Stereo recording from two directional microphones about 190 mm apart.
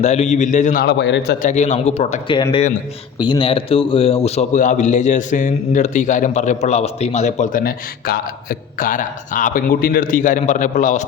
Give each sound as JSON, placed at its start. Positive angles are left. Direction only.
{"t": 0.0, "sound": "a man's voice", "side_deg": 35}
{"t": 0.9, "sound": "a man's voice", "side_deg": 65}
{"t": 1.4, "sound": "a man's voice", "side_deg": 40}